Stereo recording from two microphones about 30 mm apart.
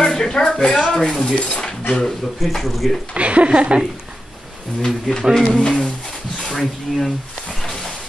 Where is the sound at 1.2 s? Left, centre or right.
Left.